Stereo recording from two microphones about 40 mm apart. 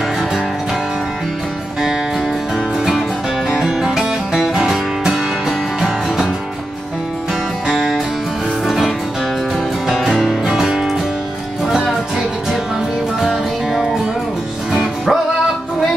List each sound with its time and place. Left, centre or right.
2.5 s music: centre
5.8 s music: centre
8.6 s music: centre
9.9 s music: centre
10.5 s music: centre
13.2 s music: centre